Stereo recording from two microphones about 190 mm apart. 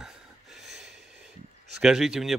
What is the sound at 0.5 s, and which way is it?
Snort, centre (ahead or behind).